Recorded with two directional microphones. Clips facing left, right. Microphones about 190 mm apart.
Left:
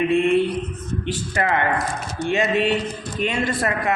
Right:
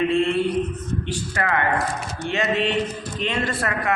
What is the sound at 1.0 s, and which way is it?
A man's voice, 20° left (ahead or behind).